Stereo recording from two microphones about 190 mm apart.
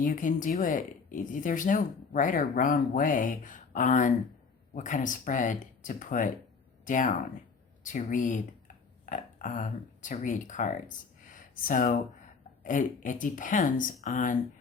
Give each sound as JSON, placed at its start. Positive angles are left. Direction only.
{"t": 0.0, "sound": "speech", "side_deg": 45}